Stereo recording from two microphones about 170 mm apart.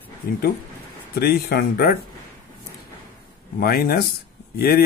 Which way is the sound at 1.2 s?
65° left (ahead or behind).